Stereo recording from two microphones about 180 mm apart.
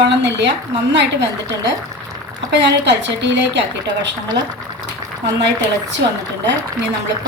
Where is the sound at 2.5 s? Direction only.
75° right (ahead or behind).